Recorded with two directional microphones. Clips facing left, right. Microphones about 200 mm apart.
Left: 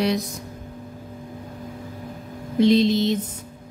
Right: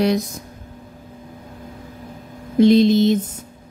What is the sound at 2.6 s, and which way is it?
Speech, 50° right (ahead or behind).